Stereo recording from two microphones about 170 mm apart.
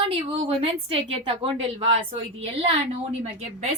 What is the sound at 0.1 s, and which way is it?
A woman's voice, 35° right (ahead or behind).